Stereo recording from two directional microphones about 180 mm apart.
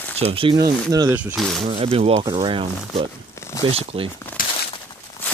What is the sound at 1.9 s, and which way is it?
Speech, 35° right (ahead or behind).